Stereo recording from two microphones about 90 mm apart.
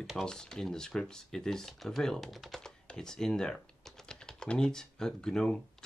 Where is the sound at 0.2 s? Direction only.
10° left (ahead or behind).